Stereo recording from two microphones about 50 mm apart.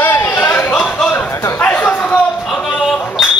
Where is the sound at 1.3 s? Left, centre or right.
Left.